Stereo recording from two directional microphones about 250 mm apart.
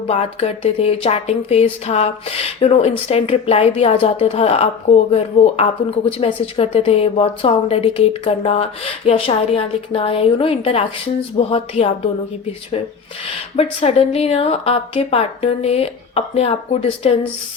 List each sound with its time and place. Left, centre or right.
0.1 s speech: left
13.2 s speech: left